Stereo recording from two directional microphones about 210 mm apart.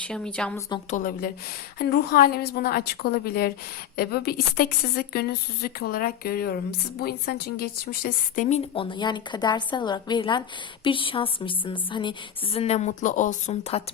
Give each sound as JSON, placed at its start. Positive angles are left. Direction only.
{"t": 0.1, "sound": "speech", "side_deg": 5}
{"t": 0.9, "sound": "a woman's voice", "side_deg": 40}